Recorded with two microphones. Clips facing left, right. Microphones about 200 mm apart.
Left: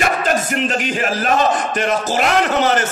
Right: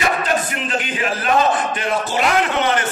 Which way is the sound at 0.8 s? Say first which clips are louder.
Left 2 dB; 45° left (ahead or behind).